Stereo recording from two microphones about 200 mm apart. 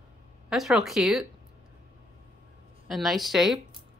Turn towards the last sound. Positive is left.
turn(degrees=0)  # may be behind; listen again after turning